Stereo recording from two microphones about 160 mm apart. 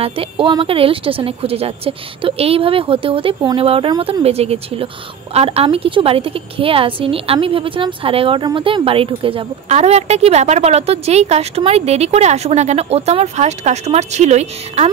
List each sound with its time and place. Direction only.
0.0 s a woman's voice: 35° right (ahead or behind)